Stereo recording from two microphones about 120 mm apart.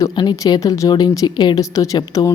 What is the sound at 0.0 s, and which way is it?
Speech, 35° left (ahead or behind).